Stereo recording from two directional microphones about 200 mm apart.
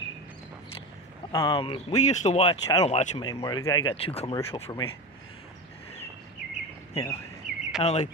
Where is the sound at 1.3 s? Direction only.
20° left (ahead or behind).